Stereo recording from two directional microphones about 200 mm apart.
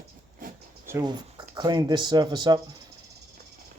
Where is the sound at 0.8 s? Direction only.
15° right (ahead or behind).